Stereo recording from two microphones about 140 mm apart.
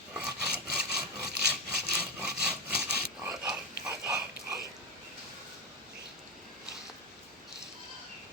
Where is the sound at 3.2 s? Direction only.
10° right (ahead or behind).